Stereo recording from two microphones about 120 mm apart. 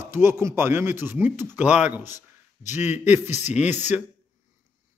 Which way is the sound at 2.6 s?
80° left.